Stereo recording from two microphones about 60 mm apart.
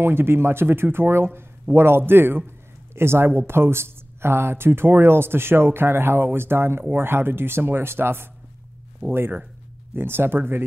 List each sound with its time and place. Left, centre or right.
0.0 s speech: right